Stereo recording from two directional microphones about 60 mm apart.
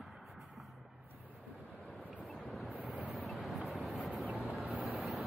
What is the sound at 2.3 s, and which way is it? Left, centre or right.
Vehicle, centre.